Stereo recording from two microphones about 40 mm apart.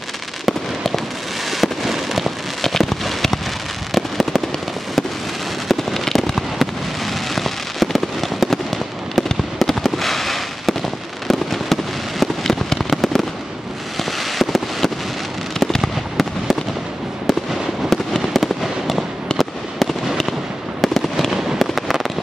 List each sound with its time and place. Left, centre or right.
0.5 s fireworks: centre
5.7 s fireworks: centre
17.8 s fireworks: centre